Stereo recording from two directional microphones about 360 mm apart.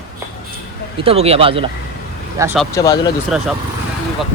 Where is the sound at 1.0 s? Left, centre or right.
Centre.